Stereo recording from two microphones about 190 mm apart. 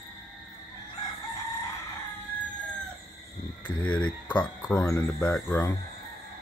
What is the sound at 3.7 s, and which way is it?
Speech, 5° left (ahead or behind).